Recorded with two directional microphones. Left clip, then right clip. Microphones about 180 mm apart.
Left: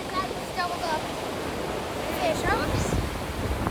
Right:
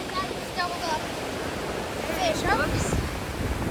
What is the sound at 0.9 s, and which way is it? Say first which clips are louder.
Waves: even; 50° left (ahead or behind).